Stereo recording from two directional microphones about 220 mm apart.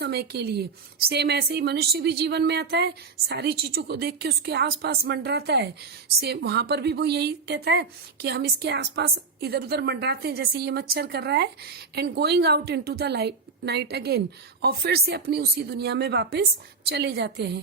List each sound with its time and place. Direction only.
0.0 s a woman's voice: 45° right (ahead or behind)